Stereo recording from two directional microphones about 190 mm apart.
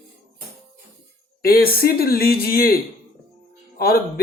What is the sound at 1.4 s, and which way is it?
Speech, 50° left (ahead or behind).